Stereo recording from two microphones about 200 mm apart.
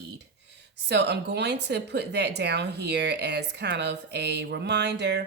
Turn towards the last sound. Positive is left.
turn(degrees=-55)  # may be behind; listen again after turning